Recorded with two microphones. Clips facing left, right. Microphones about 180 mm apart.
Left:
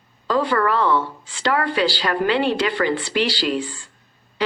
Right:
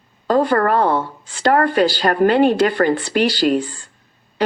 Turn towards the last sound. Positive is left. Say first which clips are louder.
# right 6 dB
turn(degrees=-50)  # may be behind; listen again after turning